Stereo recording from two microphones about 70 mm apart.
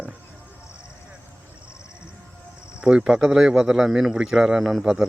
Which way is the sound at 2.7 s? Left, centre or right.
Centre.